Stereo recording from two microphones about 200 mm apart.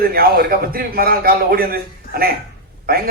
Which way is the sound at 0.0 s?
50° right (ahead or behind).